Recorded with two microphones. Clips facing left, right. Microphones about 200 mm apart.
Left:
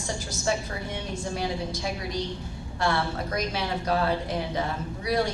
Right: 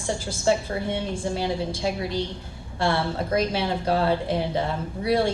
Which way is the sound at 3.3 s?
30° right (ahead or behind).